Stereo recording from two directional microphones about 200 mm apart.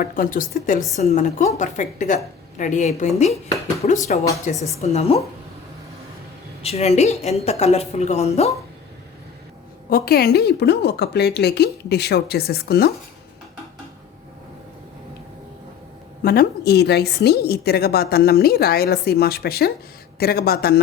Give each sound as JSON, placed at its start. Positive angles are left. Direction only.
{"t": 0.0, "sound": "a woman's voice", "side_deg": 45}
{"t": 6.6, "sound": "a woman's voice", "side_deg": 30}
{"t": 9.9, "sound": "a woman's voice", "side_deg": 50}
{"t": 16.2, "sound": "a woman's voice", "side_deg": 50}